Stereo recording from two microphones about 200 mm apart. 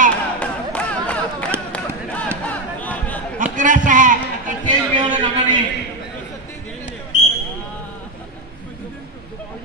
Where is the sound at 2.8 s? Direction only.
5° left (ahead or behind).